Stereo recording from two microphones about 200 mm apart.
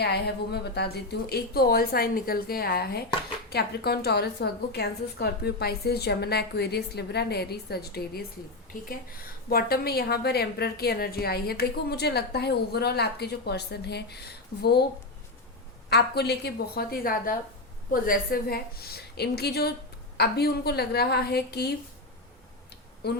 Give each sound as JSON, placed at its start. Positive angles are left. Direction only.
{"t": 0.0, "sound": "a woman's voice", "side_deg": 55}
{"t": 9.5, "sound": "a woman's voice", "side_deg": 50}
{"t": 15.9, "sound": "a woman's voice", "side_deg": 55}